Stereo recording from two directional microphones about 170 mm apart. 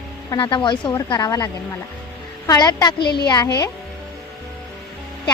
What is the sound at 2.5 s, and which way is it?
Speech, 20° left (ahead or behind).